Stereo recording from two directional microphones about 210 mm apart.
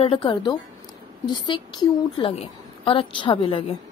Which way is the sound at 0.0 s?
25° left (ahead or behind).